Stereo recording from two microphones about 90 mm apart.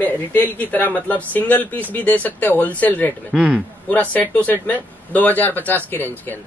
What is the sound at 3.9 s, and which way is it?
A man's voice, 15° left (ahead or behind).